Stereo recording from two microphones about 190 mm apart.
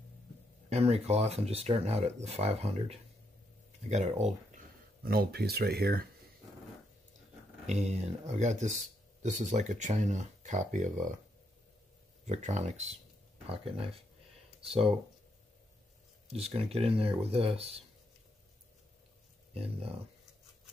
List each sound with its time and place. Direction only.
0.7 s speech: 35° right (ahead or behind)
5.0 s speech: 55° right (ahead or behind)
7.6 s speech: 35° right (ahead or behind)
12.3 s speech: 35° right (ahead or behind)
16.3 s speech: 30° right (ahead or behind)
19.5 s speech: 30° right (ahead or behind)